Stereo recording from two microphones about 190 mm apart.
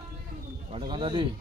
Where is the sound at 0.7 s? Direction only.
25° right (ahead or behind).